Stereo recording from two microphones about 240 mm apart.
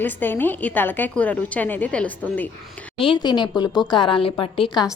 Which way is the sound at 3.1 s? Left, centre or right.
Centre.